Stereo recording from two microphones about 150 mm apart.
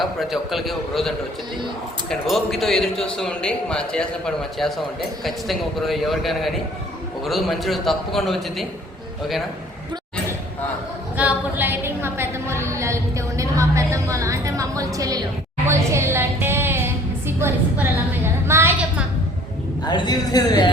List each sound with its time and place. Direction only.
0.0 s speech: centre (ahead or behind)
11.2 s a sound: 10° right (ahead or behind)
19.8 s a woman's voice: 30° left (ahead or behind)